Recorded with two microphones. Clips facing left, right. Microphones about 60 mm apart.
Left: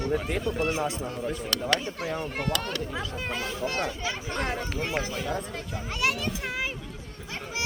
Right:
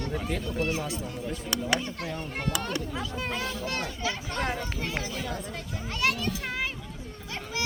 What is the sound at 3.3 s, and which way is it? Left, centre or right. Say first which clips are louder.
A child's voice: left 4 dB; left.